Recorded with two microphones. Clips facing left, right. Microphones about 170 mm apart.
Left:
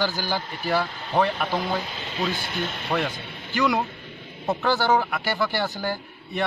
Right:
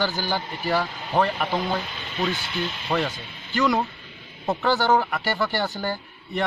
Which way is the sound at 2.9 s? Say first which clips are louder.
Right 1 dB; 5° right (ahead or behind).